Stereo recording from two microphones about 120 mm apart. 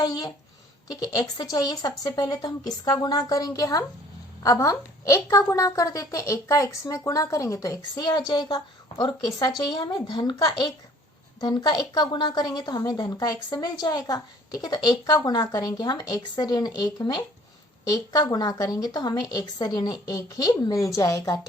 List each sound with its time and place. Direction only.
0.0 s a woman's voice: 35° left (ahead or behind)
11.3 s a woman's voice: 35° left (ahead or behind)